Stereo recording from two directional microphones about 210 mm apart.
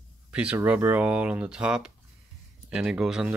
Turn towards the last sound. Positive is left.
turn(degrees=-5)  # may be behind; listen again after turning